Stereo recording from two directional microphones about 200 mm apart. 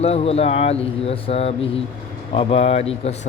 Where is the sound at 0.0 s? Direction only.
30° left (ahead or behind).